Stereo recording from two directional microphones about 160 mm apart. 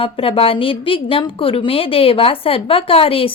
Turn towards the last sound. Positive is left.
turn(degrees=35)  # may be behind; listen again after turning